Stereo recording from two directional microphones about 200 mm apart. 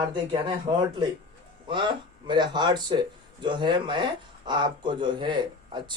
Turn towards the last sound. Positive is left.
turn(degrees=-25)  # may be behind; listen again after turning